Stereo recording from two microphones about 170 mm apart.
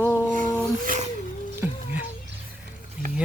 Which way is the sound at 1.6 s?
10° right (ahead or behind).